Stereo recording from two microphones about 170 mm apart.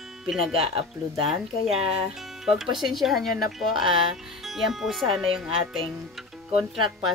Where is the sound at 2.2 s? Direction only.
Centre (ahead or behind).